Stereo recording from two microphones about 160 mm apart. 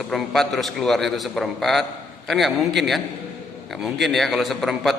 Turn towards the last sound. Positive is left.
turn(degrees=0)  # may be behind; listen again after turning